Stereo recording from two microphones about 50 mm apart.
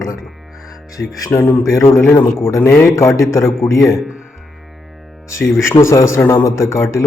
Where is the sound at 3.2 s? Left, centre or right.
Left.